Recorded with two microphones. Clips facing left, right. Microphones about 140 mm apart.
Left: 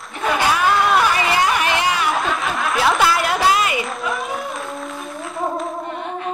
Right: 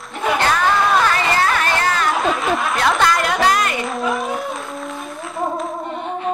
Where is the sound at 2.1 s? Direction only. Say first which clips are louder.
Right 3 dB; centre (ahead or behind).